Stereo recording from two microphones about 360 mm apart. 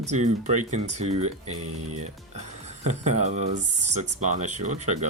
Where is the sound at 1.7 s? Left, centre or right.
Right.